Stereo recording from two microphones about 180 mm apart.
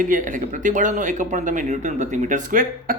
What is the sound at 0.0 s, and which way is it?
Speech, 45° right (ahead or behind).